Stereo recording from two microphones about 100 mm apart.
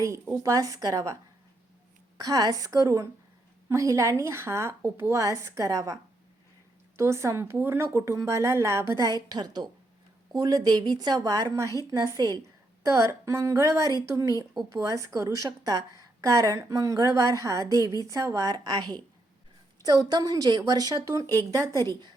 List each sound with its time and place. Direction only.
0.4 s a woman's voice: 35° right (ahead or behind)
2.1 s a woman's voice: 40° right (ahead or behind)